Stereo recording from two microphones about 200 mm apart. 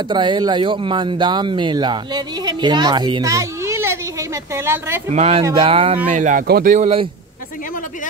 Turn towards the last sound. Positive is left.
turn(degrees=-30)  # may be behind; listen again after turning